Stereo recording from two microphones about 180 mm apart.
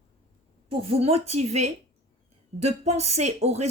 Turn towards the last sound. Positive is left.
turn(degrees=-35)  # may be behind; listen again after turning